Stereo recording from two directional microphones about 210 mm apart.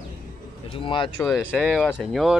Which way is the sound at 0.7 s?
25° left (ahead or behind).